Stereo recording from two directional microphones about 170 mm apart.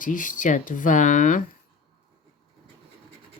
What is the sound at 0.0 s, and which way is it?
Speech, 50° left (ahead or behind).